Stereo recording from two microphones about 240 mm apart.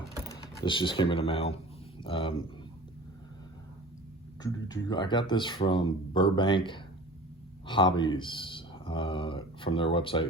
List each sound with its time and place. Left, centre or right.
0.3 s speech: centre
4.4 s speech: centre